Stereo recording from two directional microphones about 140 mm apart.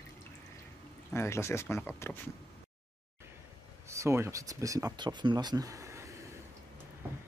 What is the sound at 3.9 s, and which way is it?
Speech, 20° right (ahead or behind).